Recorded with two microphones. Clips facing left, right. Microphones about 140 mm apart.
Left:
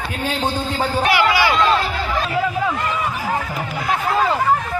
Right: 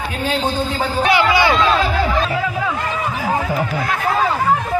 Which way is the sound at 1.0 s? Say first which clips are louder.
Right 3 dB; 25° right (ahead or behind).